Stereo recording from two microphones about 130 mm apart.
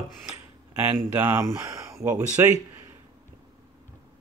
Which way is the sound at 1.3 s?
25° right (ahead or behind).